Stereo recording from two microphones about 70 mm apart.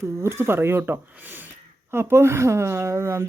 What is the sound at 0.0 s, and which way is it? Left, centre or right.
Speech, right.